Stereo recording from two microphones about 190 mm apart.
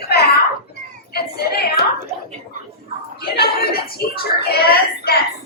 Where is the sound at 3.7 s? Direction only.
55° left (ahead or behind).